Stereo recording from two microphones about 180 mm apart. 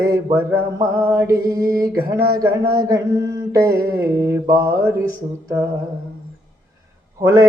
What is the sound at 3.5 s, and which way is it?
Mantra, 15° right (ahead or behind).